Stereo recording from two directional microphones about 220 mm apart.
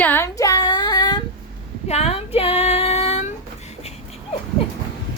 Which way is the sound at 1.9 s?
30° left (ahead or behind).